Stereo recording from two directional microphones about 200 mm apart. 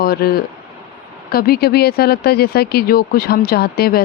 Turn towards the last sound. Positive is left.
turn(degrees=50)  # may be behind; listen again after turning